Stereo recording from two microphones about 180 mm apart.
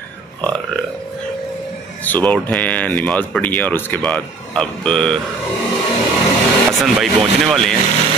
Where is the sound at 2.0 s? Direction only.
5° left (ahead or behind).